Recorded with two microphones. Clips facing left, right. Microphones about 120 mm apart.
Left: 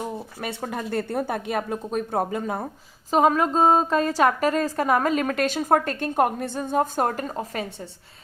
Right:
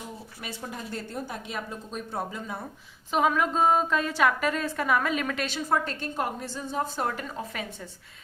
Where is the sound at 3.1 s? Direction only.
40° left (ahead or behind).